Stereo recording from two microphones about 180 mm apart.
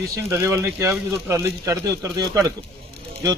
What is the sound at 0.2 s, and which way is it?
A man's voice, 15° right (ahead or behind).